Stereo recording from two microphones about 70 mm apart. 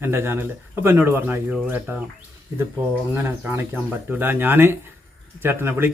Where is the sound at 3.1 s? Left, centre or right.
Right.